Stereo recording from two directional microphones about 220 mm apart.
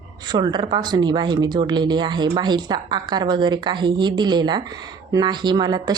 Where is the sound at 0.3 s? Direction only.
20° right (ahead or behind).